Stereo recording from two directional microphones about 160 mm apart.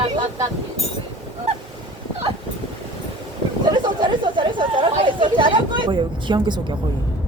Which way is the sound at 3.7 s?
30° right (ahead or behind).